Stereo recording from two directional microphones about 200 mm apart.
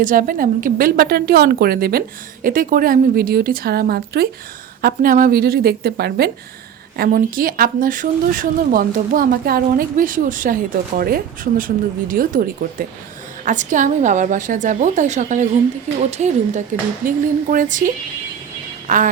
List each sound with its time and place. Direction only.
0.0 s a woman's voice: 40° right (ahead or behind)